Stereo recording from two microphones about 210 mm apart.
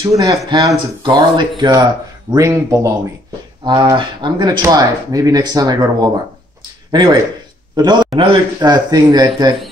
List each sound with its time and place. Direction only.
0.2 s a man's voice: 15° right (ahead or behind)